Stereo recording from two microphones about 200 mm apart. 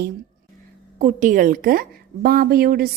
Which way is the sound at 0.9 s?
40° right (ahead or behind).